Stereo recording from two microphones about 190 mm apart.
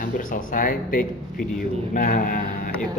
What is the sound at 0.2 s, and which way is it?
Speech, 45° left (ahead or behind).